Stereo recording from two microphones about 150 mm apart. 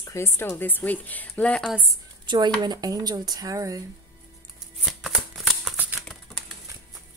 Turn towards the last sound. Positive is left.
turn(degrees=-5)  # may be behind; listen again after turning